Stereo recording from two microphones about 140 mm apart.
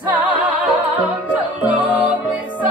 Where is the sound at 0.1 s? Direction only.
10° right (ahead or behind).